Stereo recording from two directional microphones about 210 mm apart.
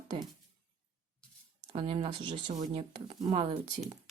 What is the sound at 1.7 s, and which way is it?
Speech, 25° right (ahead or behind).